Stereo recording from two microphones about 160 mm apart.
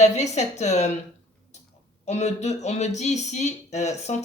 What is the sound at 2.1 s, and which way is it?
A woman's voice, 45° left (ahead or behind).